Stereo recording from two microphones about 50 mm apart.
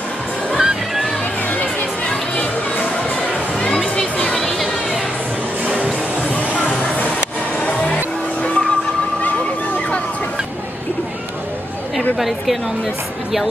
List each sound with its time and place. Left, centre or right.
0.6 s music: centre
2.4 s music: left
3.5 s music: centre
4.4 s music: centre
6.3 s music: left
8.4 s a sound: left
11.9 s chatter: centre